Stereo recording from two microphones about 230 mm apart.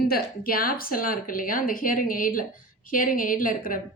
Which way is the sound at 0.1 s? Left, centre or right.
Left.